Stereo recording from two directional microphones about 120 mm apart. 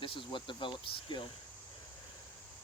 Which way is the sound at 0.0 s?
45° left (ahead or behind).